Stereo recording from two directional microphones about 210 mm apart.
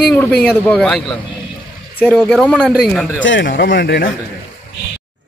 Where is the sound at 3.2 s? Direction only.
60° left (ahead or behind).